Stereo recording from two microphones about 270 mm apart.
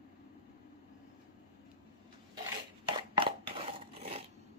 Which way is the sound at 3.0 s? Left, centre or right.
Centre.